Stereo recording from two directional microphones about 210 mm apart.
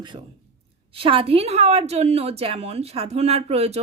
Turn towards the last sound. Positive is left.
turn(degrees=-30)  # may be behind; listen again after turning